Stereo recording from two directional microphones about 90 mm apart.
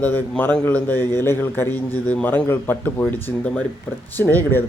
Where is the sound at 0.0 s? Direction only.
20° left (ahead or behind).